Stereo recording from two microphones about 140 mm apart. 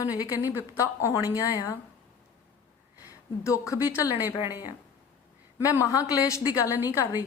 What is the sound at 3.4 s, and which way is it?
Speech, 20° left (ahead or behind).